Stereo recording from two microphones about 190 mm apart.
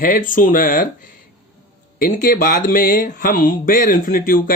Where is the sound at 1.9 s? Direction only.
50° left (ahead or behind).